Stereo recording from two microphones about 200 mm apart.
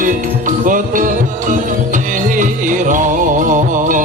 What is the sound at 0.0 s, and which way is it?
Music, 40° right (ahead or behind).